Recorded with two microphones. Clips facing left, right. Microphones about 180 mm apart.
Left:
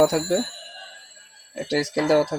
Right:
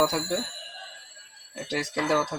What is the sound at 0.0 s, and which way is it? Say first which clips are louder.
Speech: left 7 dB; 40° left (ahead or behind).